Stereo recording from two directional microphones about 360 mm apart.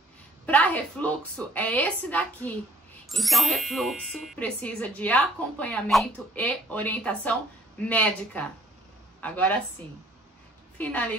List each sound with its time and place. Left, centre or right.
0.5 s speech: centre
10.8 s speech: centre